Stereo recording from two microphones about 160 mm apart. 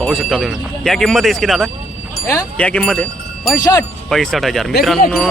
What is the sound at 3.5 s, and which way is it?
Speech, 20° left (ahead or behind).